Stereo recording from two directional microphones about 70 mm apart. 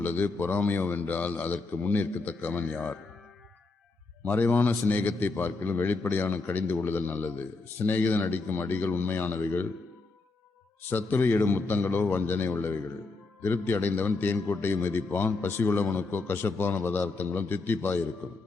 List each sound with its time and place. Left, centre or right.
0.0 s a man's voice: left
4.3 s a man's voice: left
10.8 s a man's voice: left